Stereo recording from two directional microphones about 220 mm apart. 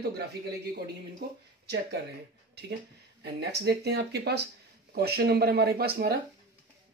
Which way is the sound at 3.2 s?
50° right (ahead or behind).